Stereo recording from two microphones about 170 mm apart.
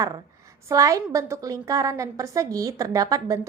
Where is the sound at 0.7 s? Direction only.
20° right (ahead or behind).